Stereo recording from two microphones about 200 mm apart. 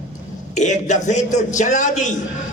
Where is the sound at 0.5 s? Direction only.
35° left (ahead or behind).